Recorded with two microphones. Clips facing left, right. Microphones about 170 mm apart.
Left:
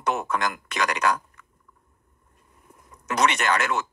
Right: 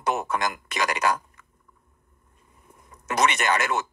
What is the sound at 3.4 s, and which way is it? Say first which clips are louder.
Speech: even; 5° right (ahead or behind).